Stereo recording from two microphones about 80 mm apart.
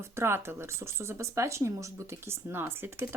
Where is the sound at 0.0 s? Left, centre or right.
Right.